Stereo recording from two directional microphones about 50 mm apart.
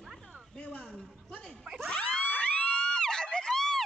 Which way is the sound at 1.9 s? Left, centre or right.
Left.